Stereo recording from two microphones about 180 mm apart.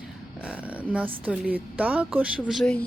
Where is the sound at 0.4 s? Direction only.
10° right (ahead or behind).